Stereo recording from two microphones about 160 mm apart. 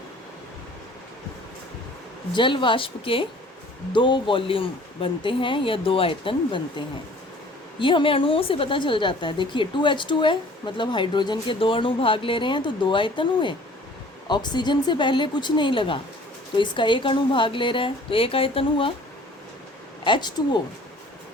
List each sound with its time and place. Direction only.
2.3 s a woman's voice: 30° left (ahead or behind)
20.1 s a woman's voice: 30° left (ahead or behind)